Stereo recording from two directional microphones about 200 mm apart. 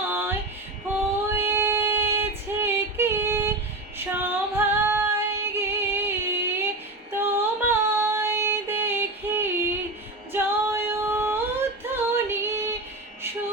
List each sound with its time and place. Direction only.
0.0 s female singing: 10° right (ahead or behind)